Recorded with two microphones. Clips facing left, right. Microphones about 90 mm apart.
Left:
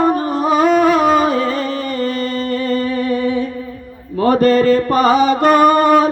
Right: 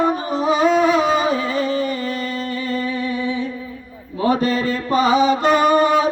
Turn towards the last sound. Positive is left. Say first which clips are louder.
# left 4 dB
turn(degrees=50)  # may be behind; listen again after turning